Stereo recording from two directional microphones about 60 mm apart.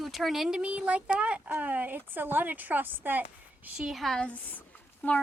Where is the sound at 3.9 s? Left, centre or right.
Centre.